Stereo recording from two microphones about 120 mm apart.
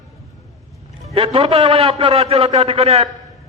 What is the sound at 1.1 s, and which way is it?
A man's voice, 50° right (ahead or behind).